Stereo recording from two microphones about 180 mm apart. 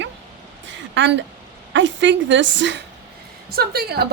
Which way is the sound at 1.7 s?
90° right.